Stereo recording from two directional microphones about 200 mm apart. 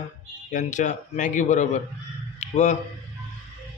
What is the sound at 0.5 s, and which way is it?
A man's voice, 40° left (ahead or behind).